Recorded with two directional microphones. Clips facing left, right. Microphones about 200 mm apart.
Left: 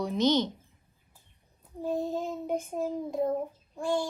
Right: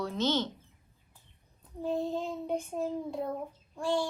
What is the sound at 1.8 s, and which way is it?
Child singing, 15° left (ahead or behind).